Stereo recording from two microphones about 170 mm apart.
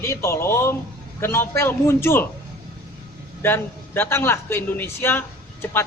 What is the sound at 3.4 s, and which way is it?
A man's voice, 15° left (ahead or behind).